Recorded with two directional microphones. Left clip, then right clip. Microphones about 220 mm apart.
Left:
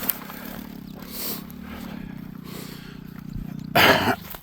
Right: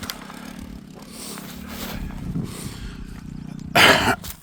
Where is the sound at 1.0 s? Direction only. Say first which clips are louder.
Left 3 dB; 15° left (ahead or behind).